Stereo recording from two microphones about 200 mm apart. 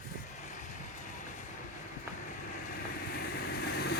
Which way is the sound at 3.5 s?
50° left (ahead or behind).